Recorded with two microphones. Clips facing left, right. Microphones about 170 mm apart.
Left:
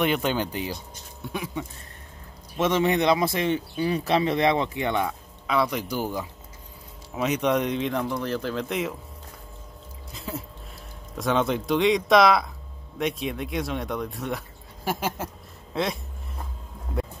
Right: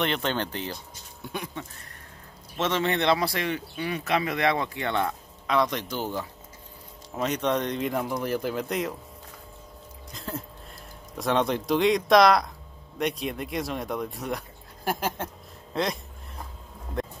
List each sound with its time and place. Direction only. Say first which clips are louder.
0.0 s speech: left 3 dB; 10° left (ahead or behind)
1.2 s speech: left 2 dB; centre (ahead or behind)
2.5 s speech: left 4 dB; 15° left (ahead or behind)
5.5 s speech: left 1 dB; 5° left (ahead or behind); by 8.6 s 10° right (ahead or behind)
8.6 s speech: left 1 dB; centre (ahead or behind)
10.1 s a sound: left 1 dB; 10° left (ahead or behind)
11.1 s speech: left 1 dB; centre (ahead or behind)